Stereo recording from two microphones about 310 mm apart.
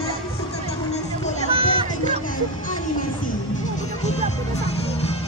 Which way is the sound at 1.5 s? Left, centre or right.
Centre.